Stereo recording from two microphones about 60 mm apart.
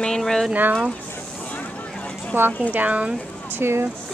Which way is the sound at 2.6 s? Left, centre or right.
Right.